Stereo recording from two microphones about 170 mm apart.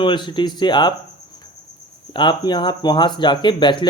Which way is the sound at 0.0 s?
25° left (ahead or behind).